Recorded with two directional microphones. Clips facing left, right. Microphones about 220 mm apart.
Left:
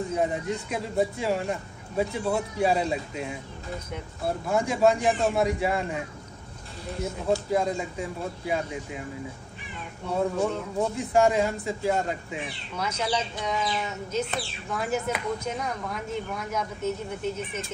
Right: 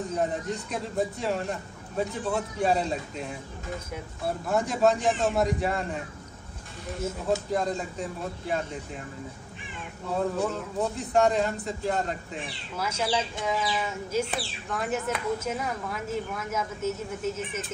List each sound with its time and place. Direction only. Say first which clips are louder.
0.1 s speech: left 1 dB; 5° left (ahead or behind)
4.5 s speech: left 1 dB; centre (ahead or behind)
7.5 s speech: left 2 dB; 5° left (ahead or behind)
10.0 s speech: left 2 dB; centre (ahead or behind)
12.7 s speech: even; 5° right (ahead or behind)